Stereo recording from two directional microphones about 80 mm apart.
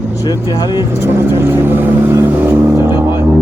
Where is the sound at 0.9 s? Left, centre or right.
Right.